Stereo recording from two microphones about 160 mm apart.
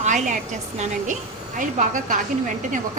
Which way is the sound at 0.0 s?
50° right (ahead or behind).